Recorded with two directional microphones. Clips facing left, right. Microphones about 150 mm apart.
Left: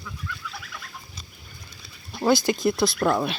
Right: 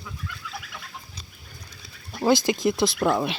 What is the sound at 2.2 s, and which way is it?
Speech, 20° right (ahead or behind).